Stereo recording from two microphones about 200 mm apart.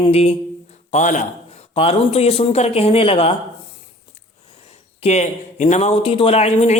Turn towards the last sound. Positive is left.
turn(degrees=35)  # may be behind; listen again after turning